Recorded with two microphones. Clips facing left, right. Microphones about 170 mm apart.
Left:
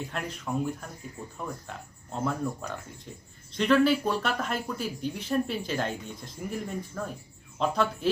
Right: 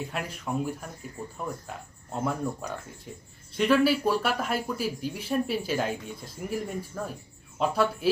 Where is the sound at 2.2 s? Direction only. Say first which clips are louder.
Even; 5° right (ahead or behind).